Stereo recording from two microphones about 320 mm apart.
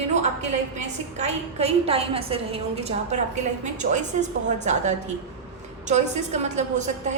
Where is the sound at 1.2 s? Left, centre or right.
Centre.